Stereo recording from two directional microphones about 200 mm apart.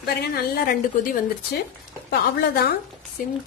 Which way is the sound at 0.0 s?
50° left (ahead or behind).